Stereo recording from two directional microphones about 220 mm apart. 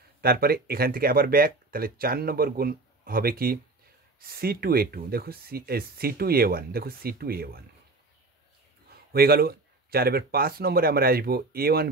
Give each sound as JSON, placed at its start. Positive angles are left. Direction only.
{"t": 0.2, "sound": "speech", "side_deg": -45}
{"t": 9.1, "sound": "speech", "side_deg": -45}